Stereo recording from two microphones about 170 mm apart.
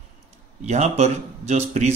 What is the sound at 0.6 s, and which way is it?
Speech, 40° right (ahead or behind).